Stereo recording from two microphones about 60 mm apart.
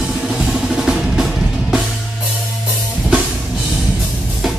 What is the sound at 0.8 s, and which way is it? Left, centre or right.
Percussion, centre.